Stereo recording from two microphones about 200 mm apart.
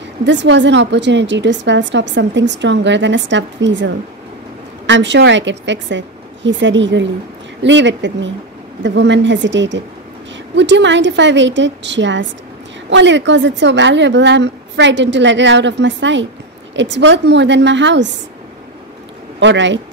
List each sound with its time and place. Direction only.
0.2 s a woman's voice: 65° right (ahead or behind)
19.4 s a woman's voice: 65° right (ahead or behind)